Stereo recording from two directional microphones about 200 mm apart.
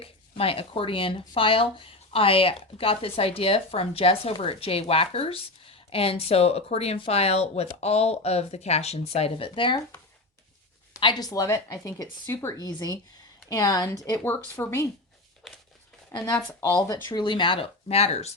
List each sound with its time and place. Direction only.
0.0 s speech: 30° left (ahead or behind)
10.9 s speech: 20° left (ahead or behind)
15.4 s crumpling: centre (ahead or behind)
16.1 s speech: 20° left (ahead or behind)
16.5 s speech: 10° left (ahead or behind); by 18.3 s 30° left (ahead or behind)